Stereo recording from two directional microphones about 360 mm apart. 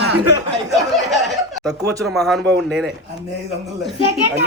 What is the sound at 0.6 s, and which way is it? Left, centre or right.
A man's voice, centre.